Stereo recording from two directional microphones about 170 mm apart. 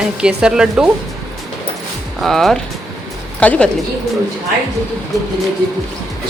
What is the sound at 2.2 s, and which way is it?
A woman's voice, centre (ahead or behind).